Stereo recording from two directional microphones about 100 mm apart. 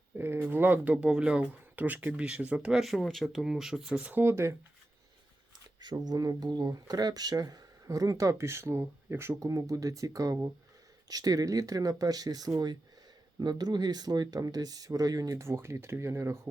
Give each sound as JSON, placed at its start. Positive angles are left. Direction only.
{"t": 0.2, "sound": "speech", "side_deg": -25}
{"t": 5.8, "sound": "speech", "side_deg": -40}